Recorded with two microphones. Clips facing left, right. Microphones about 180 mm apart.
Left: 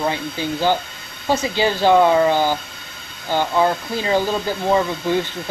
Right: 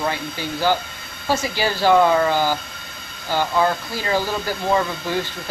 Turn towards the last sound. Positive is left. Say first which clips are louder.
# left 4 dB
turn(degrees=15)  # may be behind; listen again after turning